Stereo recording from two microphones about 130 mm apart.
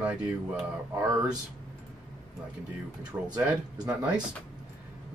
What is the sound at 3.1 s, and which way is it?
Speech, 20° right (ahead or behind).